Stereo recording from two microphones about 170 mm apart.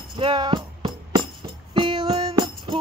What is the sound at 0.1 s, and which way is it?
Music, 25° right (ahead or behind).